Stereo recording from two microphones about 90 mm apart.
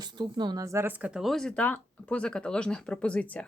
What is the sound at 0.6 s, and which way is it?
Speech, 35° right (ahead or behind).